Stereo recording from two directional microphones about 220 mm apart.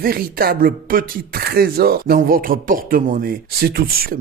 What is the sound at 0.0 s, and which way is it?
Speech, 45° right (ahead or behind).